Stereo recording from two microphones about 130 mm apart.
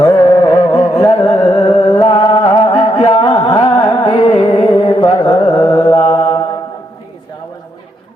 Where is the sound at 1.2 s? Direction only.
45° left (ahead or behind).